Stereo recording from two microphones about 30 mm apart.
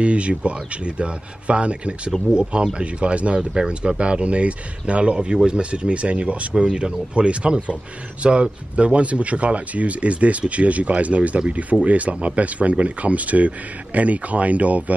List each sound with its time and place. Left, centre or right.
0.0 s speech: right
2.3 s speech: right
2.8 s speech: right
3.3 s speech: right
4.0 s speech: right
6.6 s speech: right